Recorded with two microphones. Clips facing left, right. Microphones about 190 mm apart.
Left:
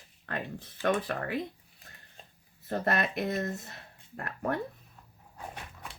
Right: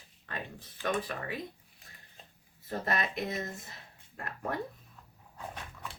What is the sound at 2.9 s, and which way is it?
Speech, 60° left (ahead or behind).